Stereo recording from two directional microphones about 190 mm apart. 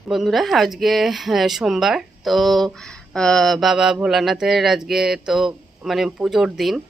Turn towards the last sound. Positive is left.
turn(degrees=0)  # may be behind; listen again after turning